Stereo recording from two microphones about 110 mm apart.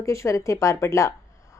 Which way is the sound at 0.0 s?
25° left (ahead or behind).